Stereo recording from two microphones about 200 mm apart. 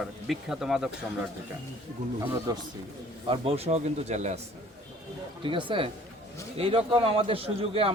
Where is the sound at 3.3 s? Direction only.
30° right (ahead or behind).